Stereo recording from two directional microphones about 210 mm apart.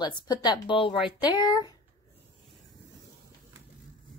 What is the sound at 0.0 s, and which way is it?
Speech, 20° left (ahead or behind).